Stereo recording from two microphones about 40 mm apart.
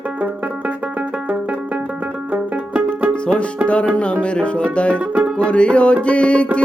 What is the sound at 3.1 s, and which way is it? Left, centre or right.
Music, left.